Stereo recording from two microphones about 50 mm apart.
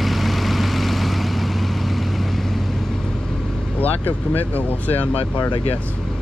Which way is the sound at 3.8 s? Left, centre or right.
Left.